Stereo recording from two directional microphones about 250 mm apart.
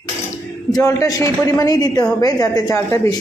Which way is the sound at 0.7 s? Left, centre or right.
Centre.